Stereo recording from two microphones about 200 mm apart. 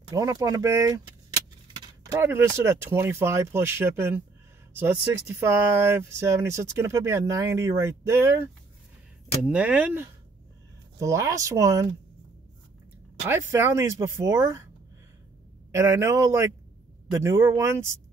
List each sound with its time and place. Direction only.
0.1 s speech: 15° right (ahead or behind)
2.1 s speech: 10° right (ahead or behind)
5.3 s speech: 10° right (ahead or behind)
9.5 s speech: 5° right (ahead or behind)
13.3 s speech: 10° right (ahead or behind)
15.7 s speech: 15° right (ahead or behind)